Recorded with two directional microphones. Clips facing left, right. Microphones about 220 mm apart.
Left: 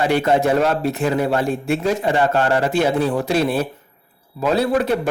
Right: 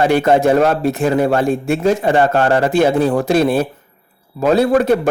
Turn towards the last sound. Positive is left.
turn(degrees=-45)  # may be behind; listen again after turning